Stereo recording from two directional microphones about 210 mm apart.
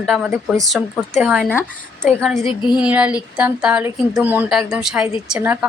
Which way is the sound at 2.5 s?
20° left (ahead or behind).